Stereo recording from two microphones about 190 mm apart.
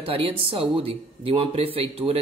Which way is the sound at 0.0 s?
30° right (ahead or behind).